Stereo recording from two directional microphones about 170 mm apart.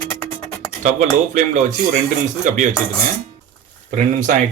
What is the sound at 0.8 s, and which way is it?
Speech, 50° right (ahead or behind).